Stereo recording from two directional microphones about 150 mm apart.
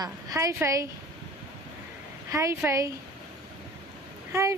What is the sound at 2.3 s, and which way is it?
Speech, 20° right (ahead or behind).